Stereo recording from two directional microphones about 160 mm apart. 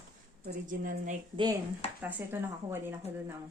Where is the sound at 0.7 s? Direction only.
55° right (ahead or behind).